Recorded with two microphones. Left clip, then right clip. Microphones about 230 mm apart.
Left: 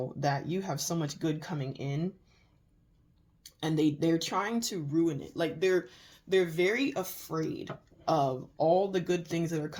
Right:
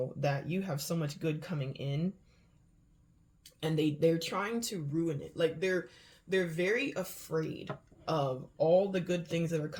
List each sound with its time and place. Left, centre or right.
0.2 s speech: left
1.6 s speech: centre
3.8 s speech: left